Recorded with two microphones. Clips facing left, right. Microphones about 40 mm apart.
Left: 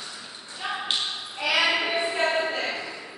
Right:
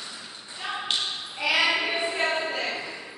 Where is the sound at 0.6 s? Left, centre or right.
Centre.